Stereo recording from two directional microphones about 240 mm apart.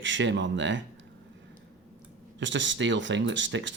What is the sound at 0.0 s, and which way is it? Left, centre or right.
Speech, right.